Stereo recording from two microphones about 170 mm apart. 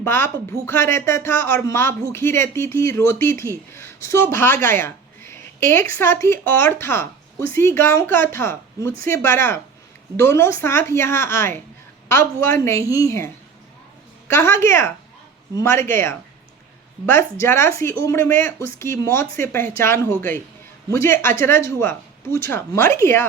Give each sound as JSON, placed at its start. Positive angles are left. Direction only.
{"t": 0.0, "sound": "speech", "side_deg": 15}